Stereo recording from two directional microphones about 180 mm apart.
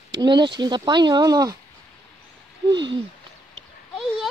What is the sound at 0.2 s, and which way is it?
Speech, 25° right (ahead or behind).